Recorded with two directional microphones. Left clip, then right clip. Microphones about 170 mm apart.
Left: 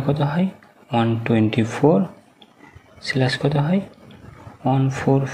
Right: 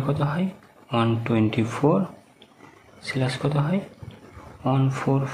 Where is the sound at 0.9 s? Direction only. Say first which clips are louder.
Left 3 dB; 5° left (ahead or behind).